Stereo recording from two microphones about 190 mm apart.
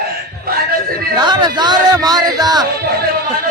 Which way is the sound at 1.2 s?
25° right (ahead or behind).